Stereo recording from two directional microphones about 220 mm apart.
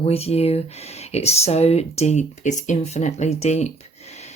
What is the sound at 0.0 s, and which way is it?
Speech, 25° left (ahead or behind).